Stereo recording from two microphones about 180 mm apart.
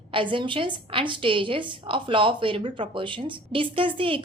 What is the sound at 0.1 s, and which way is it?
A woman's voice, 30° right (ahead or behind).